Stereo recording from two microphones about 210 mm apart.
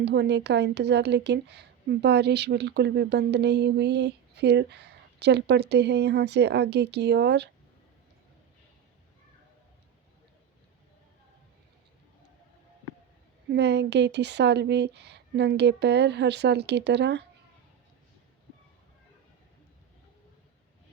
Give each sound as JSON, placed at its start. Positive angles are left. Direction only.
{"t": 0.0, "sound": "speech", "side_deg": -55}
{"t": 13.5, "sound": "speech", "side_deg": -55}